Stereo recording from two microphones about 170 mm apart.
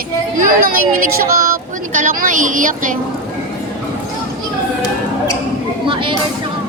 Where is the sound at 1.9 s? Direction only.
50° right (ahead or behind).